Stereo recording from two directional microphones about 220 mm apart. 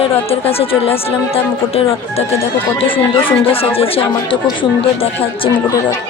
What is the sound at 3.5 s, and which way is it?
Speech, 25° left (ahead or behind).